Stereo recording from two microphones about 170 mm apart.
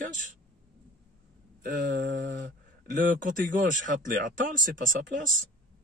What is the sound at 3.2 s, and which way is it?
Speech, 50° right (ahead or behind).